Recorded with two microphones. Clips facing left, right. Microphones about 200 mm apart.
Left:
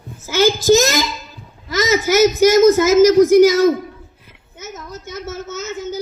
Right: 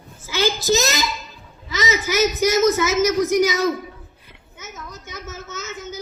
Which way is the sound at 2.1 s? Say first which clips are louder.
Left 7 dB; 90° left.